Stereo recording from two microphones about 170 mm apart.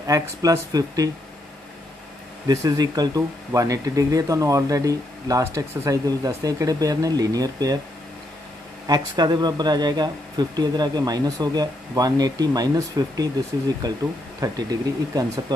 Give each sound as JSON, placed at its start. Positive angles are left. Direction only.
{"t": 0.0, "sound": "speech", "side_deg": -20}
{"t": 2.4, "sound": "speech", "side_deg": -20}
{"t": 8.8, "sound": "speech", "side_deg": -25}